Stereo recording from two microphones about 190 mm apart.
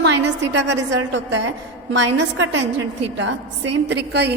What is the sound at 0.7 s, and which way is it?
Speech, 70° right (ahead or behind).